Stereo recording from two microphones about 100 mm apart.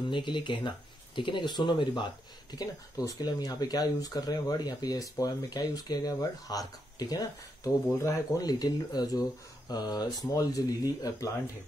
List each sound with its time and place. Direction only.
0.1 s speech: 50° left (ahead or behind)
2.5 s speech: 40° left (ahead or behind)